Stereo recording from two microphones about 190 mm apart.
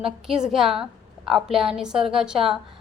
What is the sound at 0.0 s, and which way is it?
A woman's voice, 5° right (ahead or behind).